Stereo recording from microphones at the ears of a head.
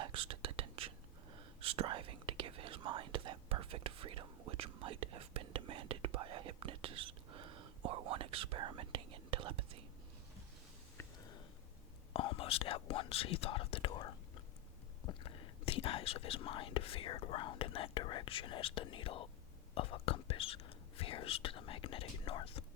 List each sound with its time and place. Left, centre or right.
0.0 s whispering: right
12.1 s whispering: left
15.0 s speech: left